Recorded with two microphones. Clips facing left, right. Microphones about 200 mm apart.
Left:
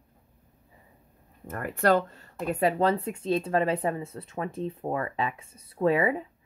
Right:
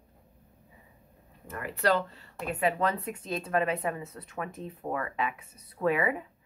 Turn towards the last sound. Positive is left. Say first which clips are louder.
# left 4 dB
turn(degrees=30)  # may be behind; listen again after turning